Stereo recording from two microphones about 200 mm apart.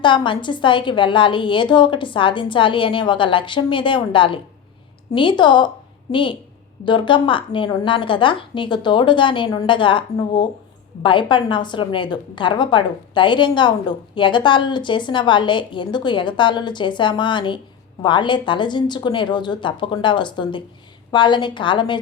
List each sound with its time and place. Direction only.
0.0 s a woman's voice: 25° left (ahead or behind)